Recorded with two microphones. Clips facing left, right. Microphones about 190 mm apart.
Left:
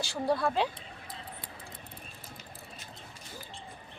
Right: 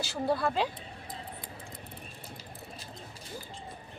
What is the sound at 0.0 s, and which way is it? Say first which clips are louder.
Speech: even; 5° right (ahead or behind).